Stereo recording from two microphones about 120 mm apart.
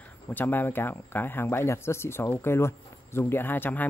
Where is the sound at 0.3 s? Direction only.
15° left (ahead or behind).